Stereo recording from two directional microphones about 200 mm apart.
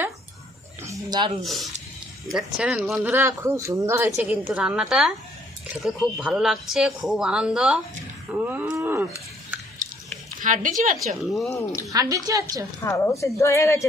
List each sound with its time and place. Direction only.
0.8 s a sound: 20° right (ahead or behind)
1.4 s speech: centre (ahead or behind)
10.4 s speech: 40° right (ahead or behind)
11.2 s speech: centre (ahead or behind)
11.5 s a woman's voice: 15° left (ahead or behind)
11.9 s speech: 15° right (ahead or behind)
12.8 s a woman's voice: 15° left (ahead or behind)